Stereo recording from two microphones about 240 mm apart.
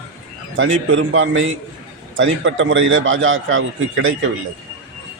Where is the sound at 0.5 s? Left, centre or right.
Right.